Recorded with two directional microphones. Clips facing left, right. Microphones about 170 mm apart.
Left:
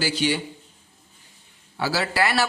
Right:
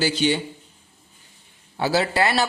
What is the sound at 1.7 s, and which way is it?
Speech, 25° right (ahead or behind).